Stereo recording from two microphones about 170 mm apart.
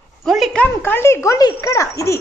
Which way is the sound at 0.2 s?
Centre (ahead or behind).